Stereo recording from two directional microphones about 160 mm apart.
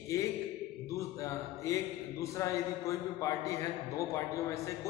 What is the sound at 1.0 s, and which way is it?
A man's voice, 20° left (ahead or behind).